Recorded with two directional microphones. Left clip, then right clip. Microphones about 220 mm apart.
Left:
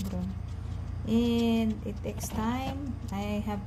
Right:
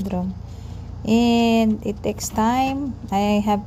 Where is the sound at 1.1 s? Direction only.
35° right (ahead or behind).